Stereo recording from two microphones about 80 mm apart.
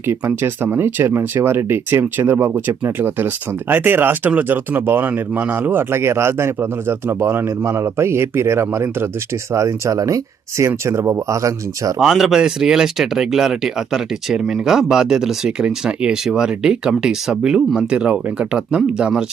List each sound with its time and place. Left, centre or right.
0.1 s speech: right
11.9 s speech: centre